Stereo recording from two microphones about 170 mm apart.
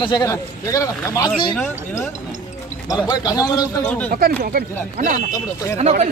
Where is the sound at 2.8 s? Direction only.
25° left (ahead or behind).